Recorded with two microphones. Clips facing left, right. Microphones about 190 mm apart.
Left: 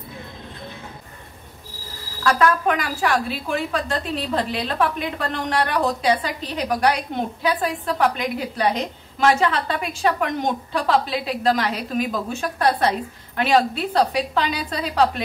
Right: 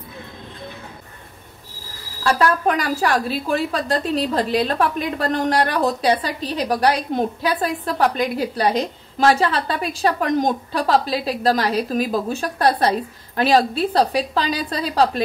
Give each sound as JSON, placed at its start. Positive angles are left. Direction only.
{"t": 2.2, "sound": "a woman's voice", "side_deg": -35}